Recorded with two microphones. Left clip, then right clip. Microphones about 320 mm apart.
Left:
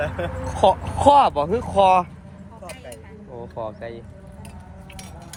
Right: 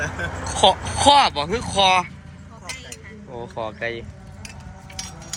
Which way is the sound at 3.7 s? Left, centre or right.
Centre.